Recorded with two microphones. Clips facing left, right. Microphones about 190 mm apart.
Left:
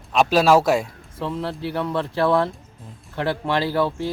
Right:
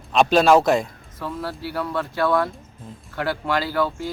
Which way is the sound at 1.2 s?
25° left (ahead or behind).